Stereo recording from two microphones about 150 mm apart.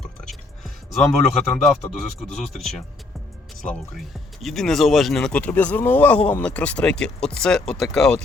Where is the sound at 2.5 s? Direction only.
Centre (ahead or behind).